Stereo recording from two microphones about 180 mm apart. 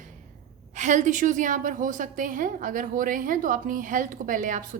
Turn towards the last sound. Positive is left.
turn(degrees=-45)  # may be behind; listen again after turning